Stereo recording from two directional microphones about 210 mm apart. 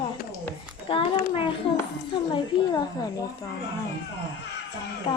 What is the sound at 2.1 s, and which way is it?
A woman's voice, 20° left (ahead or behind).